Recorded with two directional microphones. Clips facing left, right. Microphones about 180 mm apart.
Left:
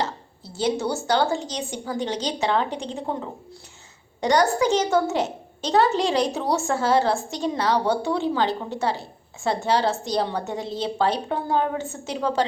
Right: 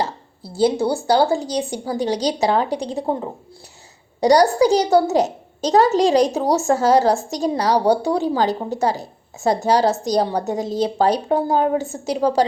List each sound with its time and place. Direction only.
0.6 s a woman's voice: 30° right (ahead or behind)